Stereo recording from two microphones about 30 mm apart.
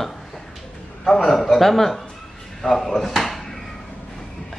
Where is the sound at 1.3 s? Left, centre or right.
Centre.